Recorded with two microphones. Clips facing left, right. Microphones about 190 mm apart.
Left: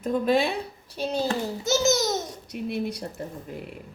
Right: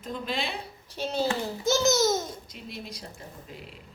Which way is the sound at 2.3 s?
65° left (ahead or behind).